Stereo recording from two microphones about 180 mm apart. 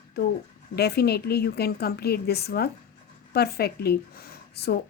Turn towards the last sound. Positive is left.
turn(degrees=60)  # may be behind; listen again after turning